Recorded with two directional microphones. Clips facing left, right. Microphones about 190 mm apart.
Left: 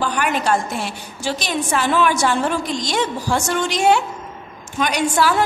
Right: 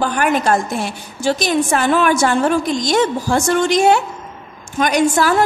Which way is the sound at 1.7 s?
50° right (ahead or behind).